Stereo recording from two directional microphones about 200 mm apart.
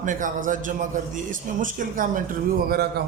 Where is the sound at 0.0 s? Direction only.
40° right (ahead or behind).